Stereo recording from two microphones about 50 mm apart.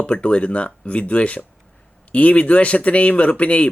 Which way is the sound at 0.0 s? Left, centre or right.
Left.